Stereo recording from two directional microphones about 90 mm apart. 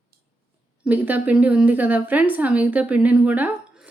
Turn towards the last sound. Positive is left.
turn(degrees=-15)  # may be behind; listen again after turning